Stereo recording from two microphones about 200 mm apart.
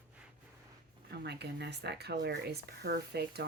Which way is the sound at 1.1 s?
55° right (ahead or behind).